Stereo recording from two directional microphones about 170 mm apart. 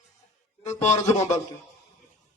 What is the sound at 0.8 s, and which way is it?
Speech, 45° left (ahead or behind).